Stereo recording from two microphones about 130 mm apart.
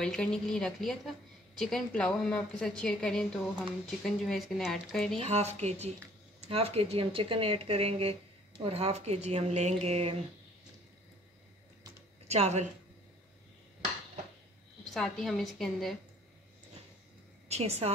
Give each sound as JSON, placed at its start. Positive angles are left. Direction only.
{"t": 0.0, "sound": "a woman's voice", "side_deg": 5}
{"t": 5.3, "sound": "a woman's voice", "side_deg": -55}
{"t": 12.3, "sound": "a woman's voice", "side_deg": -60}
{"t": 15.0, "sound": "a woman's voice", "side_deg": 5}
{"t": 17.5, "sound": "speech", "side_deg": -55}